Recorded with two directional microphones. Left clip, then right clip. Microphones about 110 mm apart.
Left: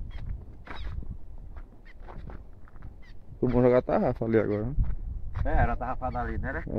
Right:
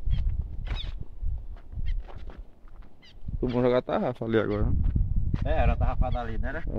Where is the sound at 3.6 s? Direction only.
15° left (ahead or behind).